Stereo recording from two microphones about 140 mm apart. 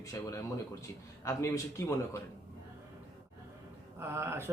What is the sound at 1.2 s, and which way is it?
Speech, 20° left (ahead or behind).